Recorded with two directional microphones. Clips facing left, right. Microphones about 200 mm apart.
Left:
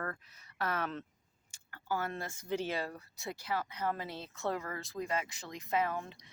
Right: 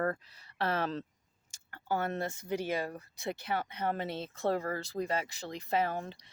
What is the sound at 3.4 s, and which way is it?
Speech, 25° right (ahead or behind).